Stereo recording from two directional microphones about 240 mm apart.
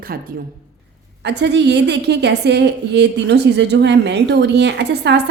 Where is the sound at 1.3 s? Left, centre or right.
Right.